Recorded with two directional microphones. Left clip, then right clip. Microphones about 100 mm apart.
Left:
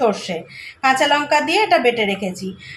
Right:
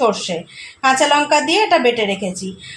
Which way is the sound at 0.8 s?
30° right (ahead or behind).